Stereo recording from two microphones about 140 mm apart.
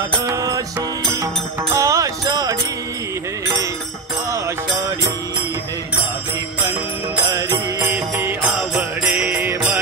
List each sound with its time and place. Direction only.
1.2 s music: 25° right (ahead or behind)
7.2 s music: 25° right (ahead or behind)
7.5 s mantra: 15° right (ahead or behind)